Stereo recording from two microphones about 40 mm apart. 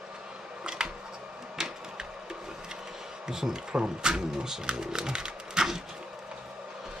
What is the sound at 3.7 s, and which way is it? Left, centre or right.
Speech, right.